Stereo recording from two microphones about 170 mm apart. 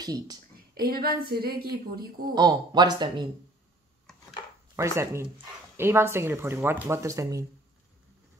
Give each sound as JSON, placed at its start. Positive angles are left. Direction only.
{"t": 0.0, "sound": "speech", "side_deg": -25}
{"t": 0.7, "sound": "a woman's voice", "side_deg": -60}
{"t": 2.3, "sound": "speech", "side_deg": -25}
{"t": 4.7, "sound": "speech", "side_deg": -15}